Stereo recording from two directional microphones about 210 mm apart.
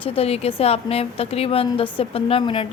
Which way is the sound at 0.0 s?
25° left (ahead or behind).